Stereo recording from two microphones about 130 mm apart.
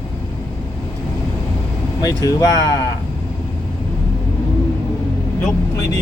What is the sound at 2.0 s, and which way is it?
Speech, 30° left (ahead or behind).